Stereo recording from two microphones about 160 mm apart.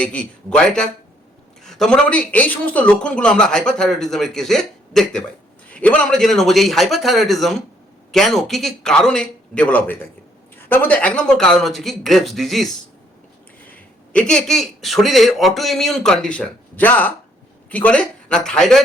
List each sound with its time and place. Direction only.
0.0 s a man's voice: 5° left (ahead or behind)